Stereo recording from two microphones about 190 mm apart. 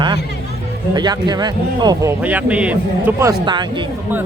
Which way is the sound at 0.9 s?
20° right (ahead or behind).